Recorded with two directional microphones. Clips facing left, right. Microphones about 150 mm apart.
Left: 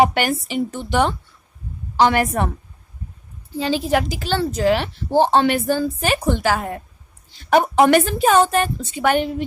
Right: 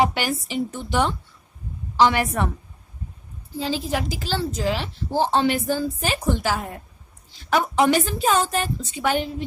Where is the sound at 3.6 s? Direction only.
65° left (ahead or behind).